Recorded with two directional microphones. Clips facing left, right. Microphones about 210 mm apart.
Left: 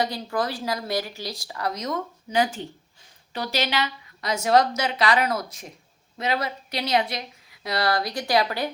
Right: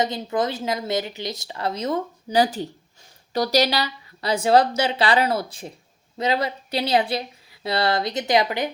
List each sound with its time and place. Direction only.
0.0 s speech: 20° right (ahead or behind)